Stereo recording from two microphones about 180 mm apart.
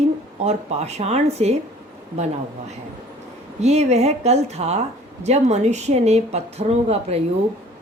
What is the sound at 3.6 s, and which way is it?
Speech, 35° right (ahead or behind).